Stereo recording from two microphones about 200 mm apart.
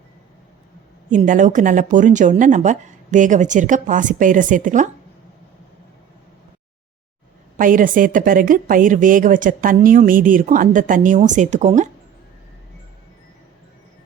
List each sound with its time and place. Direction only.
1.1 s speech: 40° right (ahead or behind)
7.5 s a woman's voice: 40° right (ahead or behind)